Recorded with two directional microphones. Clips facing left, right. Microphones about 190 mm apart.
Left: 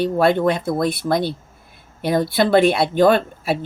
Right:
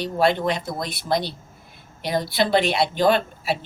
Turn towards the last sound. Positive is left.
turn(degrees=50)  # may be behind; listen again after turning